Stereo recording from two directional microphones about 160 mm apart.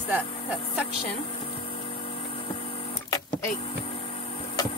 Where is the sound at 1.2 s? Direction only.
35° left (ahead or behind).